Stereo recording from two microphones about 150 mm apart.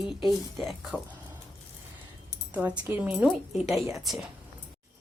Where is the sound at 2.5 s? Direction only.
10° right (ahead or behind).